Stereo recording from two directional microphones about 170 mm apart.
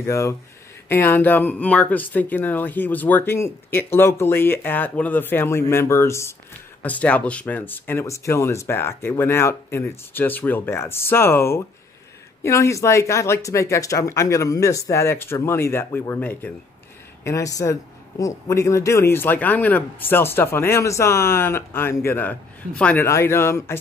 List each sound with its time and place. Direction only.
0.0 s speech: 15° left (ahead or behind)